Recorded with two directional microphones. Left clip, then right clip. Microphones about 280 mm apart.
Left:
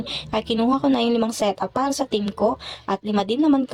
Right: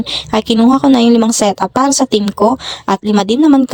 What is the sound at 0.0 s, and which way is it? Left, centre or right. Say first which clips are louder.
A woman's voice: right 10 dB; right.